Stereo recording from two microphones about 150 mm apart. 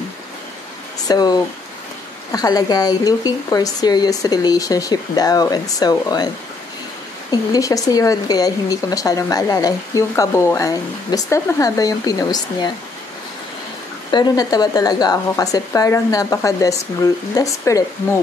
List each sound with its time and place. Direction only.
1.0 s speech: 25° left (ahead or behind)
14.1 s speech: 25° left (ahead or behind)